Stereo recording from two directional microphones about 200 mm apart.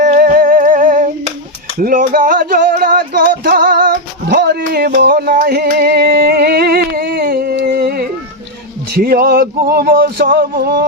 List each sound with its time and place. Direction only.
0.0 s humming: 40° right (ahead or behind)
1.8 s a sound: 45° right (ahead or behind)
9.0 s male singing: 50° right (ahead or behind)